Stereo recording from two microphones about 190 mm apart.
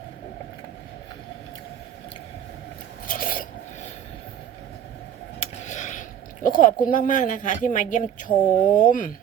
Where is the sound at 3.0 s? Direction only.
45° left (ahead or behind).